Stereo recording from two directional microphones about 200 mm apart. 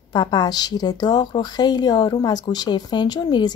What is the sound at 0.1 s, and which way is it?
A woman's voice, 20° left (ahead or behind).